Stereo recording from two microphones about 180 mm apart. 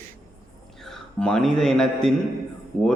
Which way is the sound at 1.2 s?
5° left (ahead or behind).